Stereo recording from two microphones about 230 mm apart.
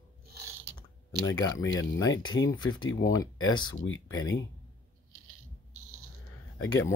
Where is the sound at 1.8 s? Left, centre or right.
Centre.